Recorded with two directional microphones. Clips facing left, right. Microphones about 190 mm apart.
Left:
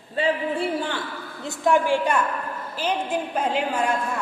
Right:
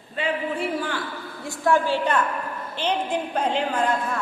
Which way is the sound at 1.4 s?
20° left (ahead or behind).